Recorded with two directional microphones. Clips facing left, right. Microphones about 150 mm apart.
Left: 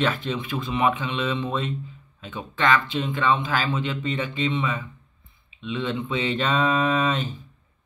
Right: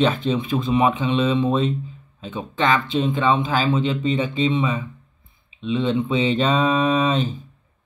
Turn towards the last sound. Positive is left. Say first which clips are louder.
# right 4 dB
turn(degrees=-20)  # may be behind; listen again after turning